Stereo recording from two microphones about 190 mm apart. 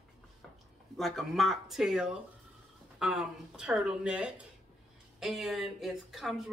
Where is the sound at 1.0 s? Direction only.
Centre (ahead or behind).